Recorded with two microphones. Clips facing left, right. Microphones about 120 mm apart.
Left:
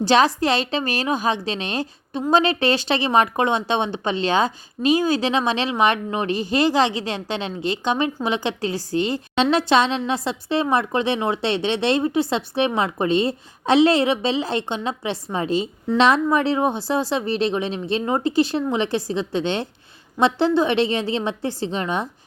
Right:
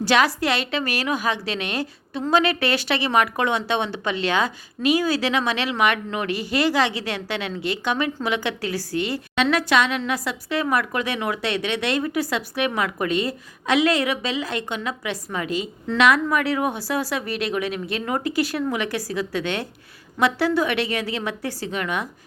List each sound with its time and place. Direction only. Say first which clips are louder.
0.0 s a woman's voice: left 3 dB; 25° left (ahead or behind)